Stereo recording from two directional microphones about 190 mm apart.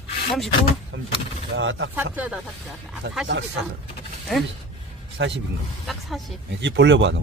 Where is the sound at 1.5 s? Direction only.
90° right.